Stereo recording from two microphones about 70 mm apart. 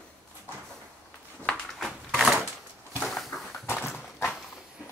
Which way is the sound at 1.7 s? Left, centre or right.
Centre.